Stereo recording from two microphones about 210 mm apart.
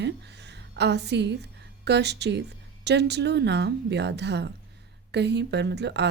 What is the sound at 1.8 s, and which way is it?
A woman's voice, 55° right (ahead or behind).